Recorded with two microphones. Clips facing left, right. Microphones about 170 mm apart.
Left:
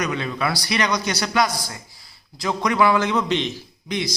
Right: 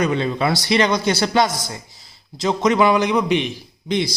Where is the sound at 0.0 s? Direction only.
30° right (ahead or behind); by 3.6 s 10° right (ahead or behind).